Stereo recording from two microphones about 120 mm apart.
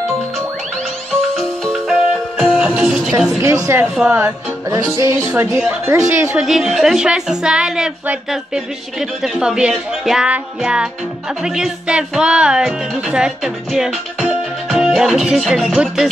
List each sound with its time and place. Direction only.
1.3 s music: centre (ahead or behind)
3.3 s music: 25° right (ahead or behind)
5.1 s speech: 10° right (ahead or behind)
5.7 s music: 20° right (ahead or behind)
6.3 s speech: centre (ahead or behind)